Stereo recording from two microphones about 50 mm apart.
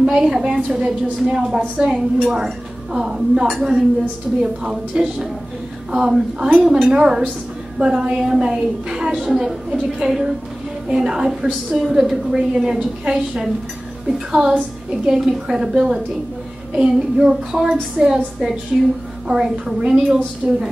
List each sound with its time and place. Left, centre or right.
0.0 s a woman's voice: centre
2.3 s a woman's voice: centre
19.5 s a woman's voice: right